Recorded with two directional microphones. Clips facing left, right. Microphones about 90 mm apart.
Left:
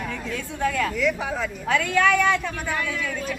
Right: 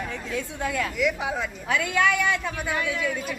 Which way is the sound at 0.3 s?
20° right (ahead or behind).